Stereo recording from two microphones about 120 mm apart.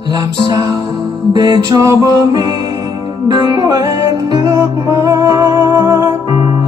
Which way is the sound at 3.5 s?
30° right (ahead or behind).